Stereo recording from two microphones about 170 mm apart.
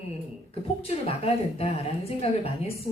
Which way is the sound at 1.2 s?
35° left (ahead or behind).